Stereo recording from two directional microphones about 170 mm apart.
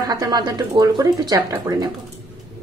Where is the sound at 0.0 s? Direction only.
25° right (ahead or behind).